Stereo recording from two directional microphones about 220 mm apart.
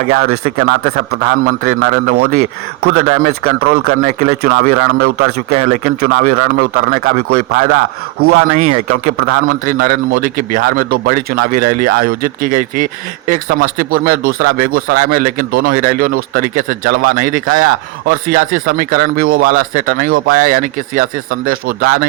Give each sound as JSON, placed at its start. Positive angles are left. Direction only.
{"t": 0.6, "sound": "a man's voice", "side_deg": -50}